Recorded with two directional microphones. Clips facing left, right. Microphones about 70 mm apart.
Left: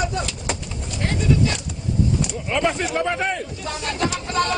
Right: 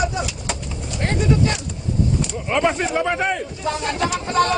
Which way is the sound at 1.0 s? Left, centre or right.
Right.